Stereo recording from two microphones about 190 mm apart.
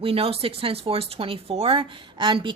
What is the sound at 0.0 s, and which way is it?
Speech, 30° right (ahead or behind).